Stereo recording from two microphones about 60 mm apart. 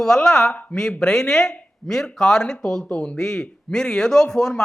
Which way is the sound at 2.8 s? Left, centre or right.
Left.